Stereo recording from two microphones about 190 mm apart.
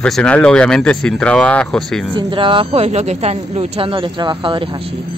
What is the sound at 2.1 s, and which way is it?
Speech, 25° right (ahead or behind).